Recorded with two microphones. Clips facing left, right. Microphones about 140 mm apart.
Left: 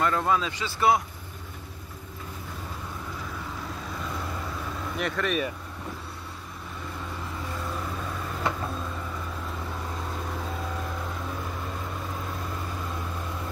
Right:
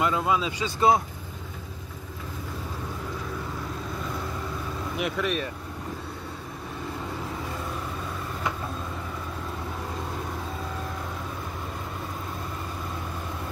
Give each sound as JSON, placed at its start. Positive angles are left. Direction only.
{"t": 0.0, "sound": "speech", "side_deg": -10}
{"t": 4.9, "sound": "speech", "side_deg": -5}